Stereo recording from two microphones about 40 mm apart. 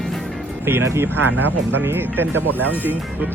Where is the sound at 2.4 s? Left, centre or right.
Left.